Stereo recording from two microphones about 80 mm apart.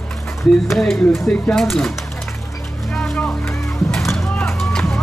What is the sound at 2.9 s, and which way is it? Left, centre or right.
Vehicle, centre.